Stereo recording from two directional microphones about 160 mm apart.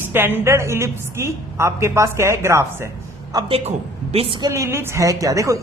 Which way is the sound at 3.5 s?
40° right (ahead or behind).